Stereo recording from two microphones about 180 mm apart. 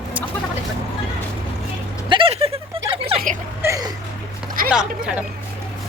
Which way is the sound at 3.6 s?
20° right (ahead or behind).